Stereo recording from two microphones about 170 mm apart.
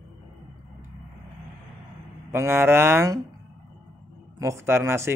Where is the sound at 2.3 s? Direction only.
15° right (ahead or behind).